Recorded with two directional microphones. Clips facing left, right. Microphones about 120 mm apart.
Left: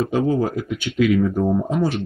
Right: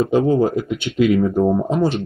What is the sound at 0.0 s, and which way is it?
Speech, 30° right (ahead or behind).